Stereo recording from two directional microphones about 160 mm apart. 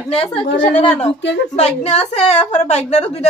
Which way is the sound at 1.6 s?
40° left (ahead or behind).